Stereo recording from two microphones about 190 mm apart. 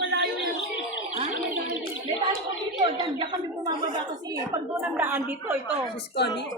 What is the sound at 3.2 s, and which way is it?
Speech, 25° right (ahead or behind).